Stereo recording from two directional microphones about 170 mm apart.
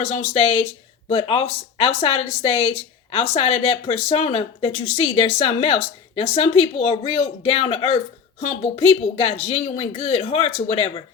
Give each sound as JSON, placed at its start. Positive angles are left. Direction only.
{"t": 0.0, "sound": "speech", "side_deg": 35}